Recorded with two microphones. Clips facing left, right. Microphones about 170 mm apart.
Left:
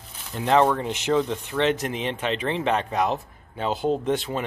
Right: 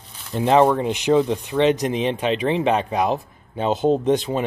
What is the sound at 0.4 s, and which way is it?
Speech, 15° right (ahead or behind).